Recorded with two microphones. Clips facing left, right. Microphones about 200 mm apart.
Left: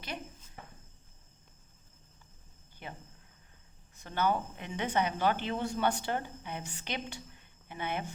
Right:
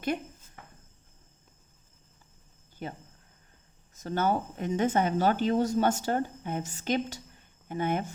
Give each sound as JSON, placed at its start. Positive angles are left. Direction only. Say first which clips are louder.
{"t": 2.8, "sound": "speech", "louder": "right 7 dB", "side_deg": -40}